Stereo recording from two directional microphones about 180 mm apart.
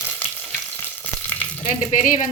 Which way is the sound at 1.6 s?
45° left (ahead or behind).